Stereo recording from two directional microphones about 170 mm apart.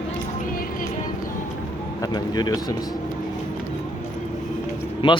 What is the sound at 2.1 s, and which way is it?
Speech, 25° left (ahead or behind).